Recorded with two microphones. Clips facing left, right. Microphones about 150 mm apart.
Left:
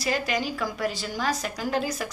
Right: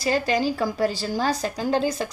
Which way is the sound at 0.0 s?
30° right (ahead or behind).